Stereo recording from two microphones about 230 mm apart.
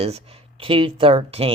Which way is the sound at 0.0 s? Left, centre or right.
Right.